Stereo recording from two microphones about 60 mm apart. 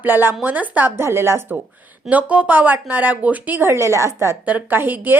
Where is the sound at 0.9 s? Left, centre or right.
Right.